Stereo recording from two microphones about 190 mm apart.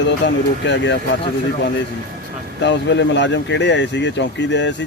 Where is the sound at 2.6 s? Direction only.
70° left (ahead or behind).